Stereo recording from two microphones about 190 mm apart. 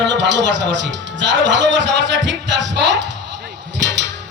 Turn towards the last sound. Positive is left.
turn(degrees=-65)  # may be behind; listen again after turning